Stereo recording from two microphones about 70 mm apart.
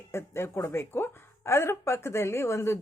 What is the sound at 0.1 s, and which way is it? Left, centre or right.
A woman's voice, left.